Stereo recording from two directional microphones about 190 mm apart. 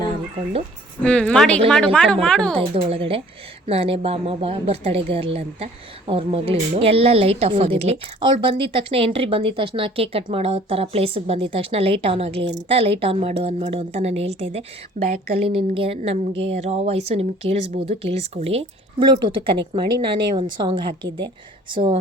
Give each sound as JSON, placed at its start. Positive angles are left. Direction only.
{"t": 1.0, "sound": "speech", "side_deg": 5}
{"t": 2.6, "sound": "a woman's voice", "side_deg": -30}